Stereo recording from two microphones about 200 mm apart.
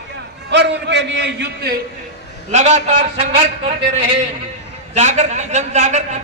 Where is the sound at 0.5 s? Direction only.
65° right (ahead or behind).